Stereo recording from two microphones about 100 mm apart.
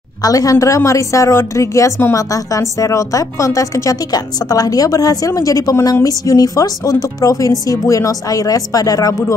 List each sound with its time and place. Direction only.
0.2 s a woman's voice: 35° left (ahead or behind)